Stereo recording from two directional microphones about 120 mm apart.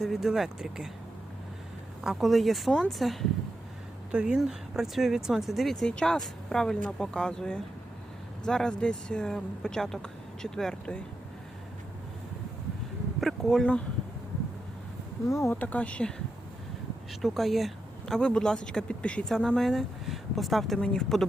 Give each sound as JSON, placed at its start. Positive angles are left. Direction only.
{"t": 0.0, "sound": "speech", "side_deg": 0}
{"t": 2.0, "sound": "speech", "side_deg": 0}
{"t": 13.1, "sound": "speech", "side_deg": 0}
{"t": 15.3, "sound": "speech", "side_deg": 25}
{"t": 15.6, "sound": "speech", "side_deg": 10}